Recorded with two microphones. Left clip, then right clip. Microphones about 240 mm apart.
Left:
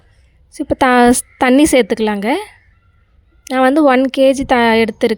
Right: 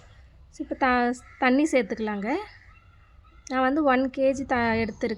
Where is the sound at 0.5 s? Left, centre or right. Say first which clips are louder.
Left 12 dB; left.